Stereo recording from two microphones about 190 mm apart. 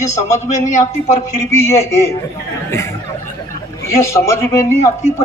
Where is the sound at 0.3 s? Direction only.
40° left (ahead or behind).